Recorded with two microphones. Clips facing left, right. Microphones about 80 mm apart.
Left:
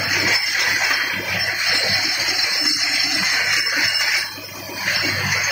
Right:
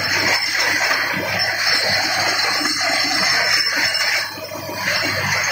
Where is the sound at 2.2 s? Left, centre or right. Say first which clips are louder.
Right 5 dB; right.